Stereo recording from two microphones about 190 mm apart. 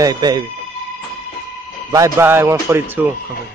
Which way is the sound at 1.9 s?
15° right (ahead or behind).